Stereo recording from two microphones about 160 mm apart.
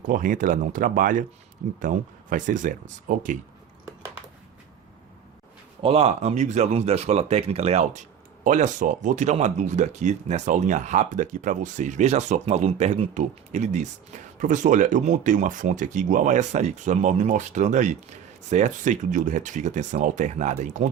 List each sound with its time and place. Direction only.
0.1 s speech: 55° right (ahead or behind)
5.8 s speech: 35° right (ahead or behind)